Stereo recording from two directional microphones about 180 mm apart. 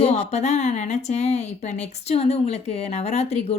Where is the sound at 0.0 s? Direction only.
40° left (ahead or behind).